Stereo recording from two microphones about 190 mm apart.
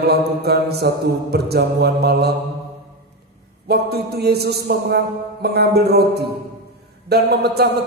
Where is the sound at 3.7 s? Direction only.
60° right (ahead or behind).